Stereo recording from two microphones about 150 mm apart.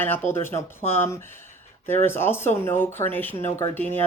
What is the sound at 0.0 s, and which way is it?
Speech, 15° left (ahead or behind).